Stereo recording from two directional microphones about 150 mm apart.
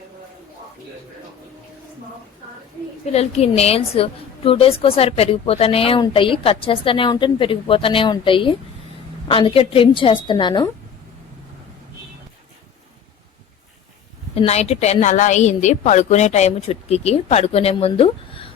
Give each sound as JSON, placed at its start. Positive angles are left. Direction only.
{"t": 3.1, "sound": "a woman's voice", "side_deg": 45}
{"t": 14.3, "sound": "a woman's voice", "side_deg": 45}